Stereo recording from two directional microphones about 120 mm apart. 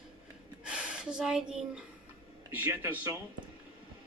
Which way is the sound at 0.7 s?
10° right (ahead or behind).